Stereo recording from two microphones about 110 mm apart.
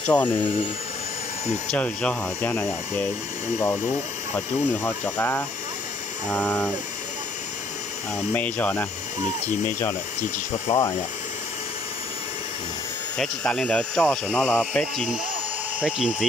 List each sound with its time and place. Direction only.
0.0 s speech: 15° left (ahead or behind)
1.7 s speech: 10° left (ahead or behind)
4.8 s speech: 20° left (ahead or behind)
8.3 s speech: 15° left (ahead or behind)
10.7 s speech: 60° left (ahead or behind)
13.2 s speech: 5° left (ahead or behind)
15.8 s speech: 5° right (ahead or behind)